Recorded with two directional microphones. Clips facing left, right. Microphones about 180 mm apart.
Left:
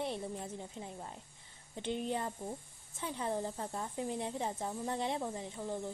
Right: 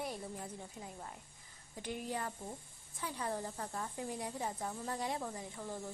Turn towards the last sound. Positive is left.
turn(degrees=20)  # may be behind; listen again after turning